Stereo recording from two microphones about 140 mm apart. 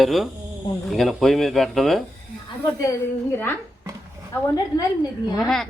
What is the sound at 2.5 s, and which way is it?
A woman's voice, 25° left (ahead or behind).